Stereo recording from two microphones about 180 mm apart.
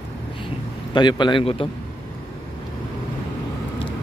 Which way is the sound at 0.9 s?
25° left (ahead or behind).